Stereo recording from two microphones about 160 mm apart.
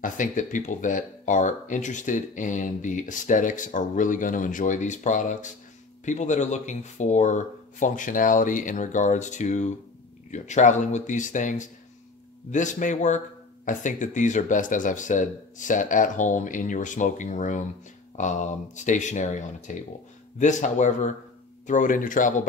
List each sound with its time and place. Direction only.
0.0 s speech: 55° left (ahead or behind)